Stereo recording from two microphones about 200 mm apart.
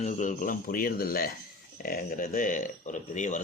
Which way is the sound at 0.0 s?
40° left (ahead or behind).